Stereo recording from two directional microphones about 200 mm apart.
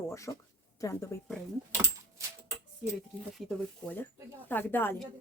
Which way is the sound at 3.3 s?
Centre (ahead or behind).